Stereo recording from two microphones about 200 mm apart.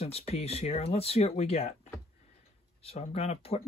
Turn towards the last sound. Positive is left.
turn(degrees=30)  # may be behind; listen again after turning